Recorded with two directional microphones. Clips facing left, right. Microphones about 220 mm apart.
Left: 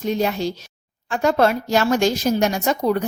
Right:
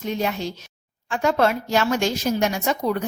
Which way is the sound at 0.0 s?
35° left (ahead or behind).